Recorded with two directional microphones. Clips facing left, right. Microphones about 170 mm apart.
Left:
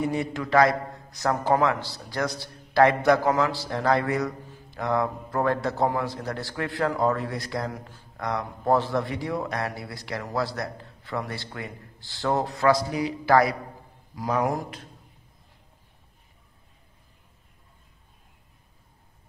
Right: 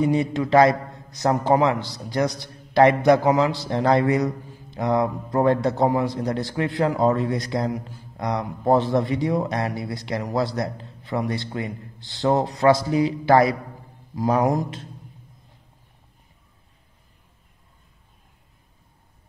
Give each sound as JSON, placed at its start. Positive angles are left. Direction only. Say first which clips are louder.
{"t": 0.0, "sound": "a man's voice", "louder": "right 6 dB", "side_deg": -20}